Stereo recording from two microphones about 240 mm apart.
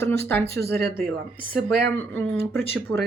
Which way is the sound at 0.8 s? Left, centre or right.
Right.